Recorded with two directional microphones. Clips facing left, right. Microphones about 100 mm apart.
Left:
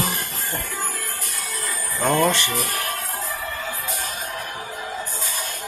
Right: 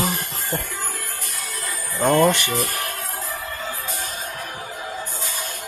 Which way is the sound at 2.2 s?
15° right (ahead or behind).